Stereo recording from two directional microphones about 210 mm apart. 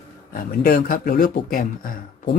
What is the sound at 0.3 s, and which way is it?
Speech, 40° left (ahead or behind).